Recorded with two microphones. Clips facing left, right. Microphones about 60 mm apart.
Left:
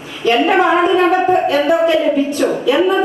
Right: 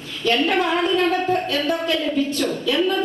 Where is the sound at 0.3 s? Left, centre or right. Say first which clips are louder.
Left 7 dB; left.